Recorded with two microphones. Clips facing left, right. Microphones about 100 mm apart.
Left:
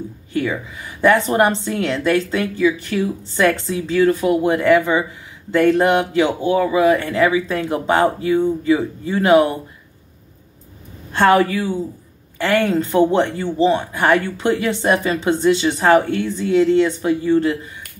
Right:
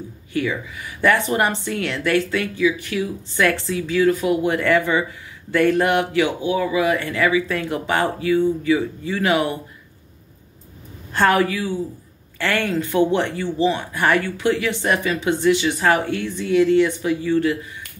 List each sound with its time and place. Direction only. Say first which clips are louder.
0.3 s speech: left 2 dB; 30° left (ahead or behind)
1.0 s a woman's voice: left 4 dB; 20° left (ahead or behind)
6.4 s speech: left 4 dB; 40° left (ahead or behind)
7.1 s a woman's voice: left 3 dB; 25° left (ahead or behind)
11.1 s a woman's voice: left 3 dB; 20° left (ahead or behind)
12.7 s a woman's voice: left 3 dB; 35° left (ahead or behind)
13.9 s a woman's voice: left 3 dB; 20° left (ahead or behind); by 17.5 s 35° left (ahead or behind)